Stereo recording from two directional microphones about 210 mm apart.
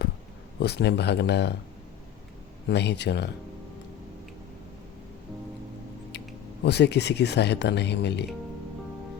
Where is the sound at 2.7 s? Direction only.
55° left (ahead or behind).